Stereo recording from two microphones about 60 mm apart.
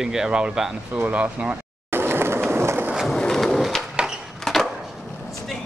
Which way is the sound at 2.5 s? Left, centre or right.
Right.